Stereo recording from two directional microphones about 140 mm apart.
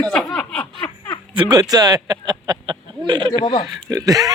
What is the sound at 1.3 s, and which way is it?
Speech, 30° right (ahead or behind).